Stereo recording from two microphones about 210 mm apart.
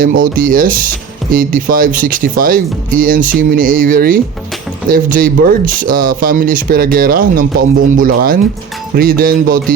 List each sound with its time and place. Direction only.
0.0 s speech: 40° right (ahead or behind)